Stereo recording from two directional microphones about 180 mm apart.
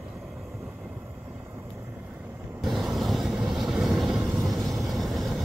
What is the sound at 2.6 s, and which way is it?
Vehicle, centre (ahead or behind).